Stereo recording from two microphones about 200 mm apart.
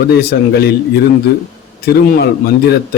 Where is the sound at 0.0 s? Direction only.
50° left (ahead or behind).